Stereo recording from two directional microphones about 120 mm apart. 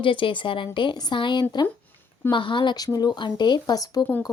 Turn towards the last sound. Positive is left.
turn(degrees=30)  # may be behind; listen again after turning